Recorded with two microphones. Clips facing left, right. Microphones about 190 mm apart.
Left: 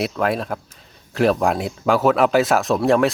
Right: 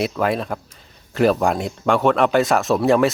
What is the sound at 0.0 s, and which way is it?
Speech, centre (ahead or behind).